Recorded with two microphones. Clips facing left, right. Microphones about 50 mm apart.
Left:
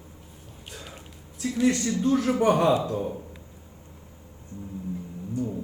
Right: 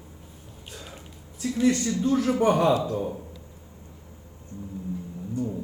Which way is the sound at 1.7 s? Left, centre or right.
Left.